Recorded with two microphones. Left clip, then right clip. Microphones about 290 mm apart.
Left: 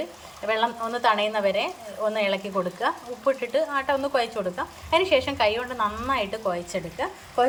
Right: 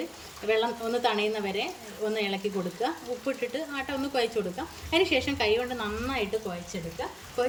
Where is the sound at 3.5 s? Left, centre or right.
Centre.